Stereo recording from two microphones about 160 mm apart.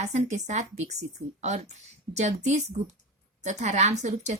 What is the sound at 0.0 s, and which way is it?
Speech, 45° right (ahead or behind).